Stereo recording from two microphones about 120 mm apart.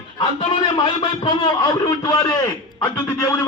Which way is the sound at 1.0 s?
35° left (ahead or behind).